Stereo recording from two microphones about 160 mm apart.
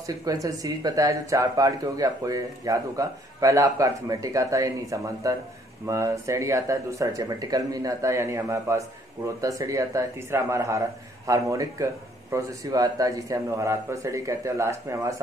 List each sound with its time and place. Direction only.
0.0 s speech: 20° right (ahead or behind)